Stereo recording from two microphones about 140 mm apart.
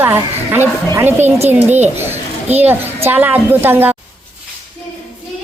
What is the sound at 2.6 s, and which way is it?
A woman's voice, 15° right (ahead or behind).